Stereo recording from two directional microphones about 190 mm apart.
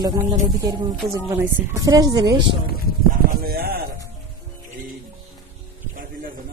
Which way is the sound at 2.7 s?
50° right (ahead or behind).